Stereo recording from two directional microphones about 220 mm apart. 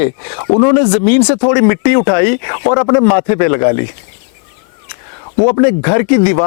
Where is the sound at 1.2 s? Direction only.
20° left (ahead or behind).